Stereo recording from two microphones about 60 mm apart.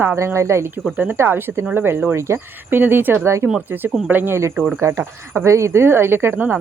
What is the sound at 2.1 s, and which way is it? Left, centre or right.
Speech, right.